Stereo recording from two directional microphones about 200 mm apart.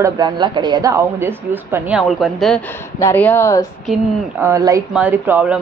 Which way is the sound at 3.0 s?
10° left (ahead or behind).